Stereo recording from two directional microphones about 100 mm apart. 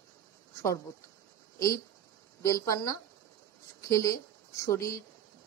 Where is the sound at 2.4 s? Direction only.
30° left (ahead or behind).